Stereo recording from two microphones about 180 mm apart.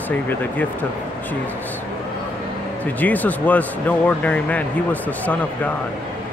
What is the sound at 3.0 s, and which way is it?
Speech, 10° left (ahead or behind).